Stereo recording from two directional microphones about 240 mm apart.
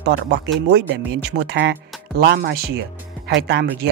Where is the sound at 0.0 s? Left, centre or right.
Right.